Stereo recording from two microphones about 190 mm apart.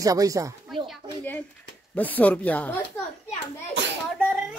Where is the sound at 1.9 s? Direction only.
10° left (ahead or behind).